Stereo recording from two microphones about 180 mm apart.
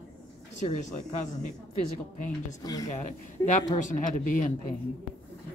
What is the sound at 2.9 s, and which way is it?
A woman's voice, 40° left (ahead or behind).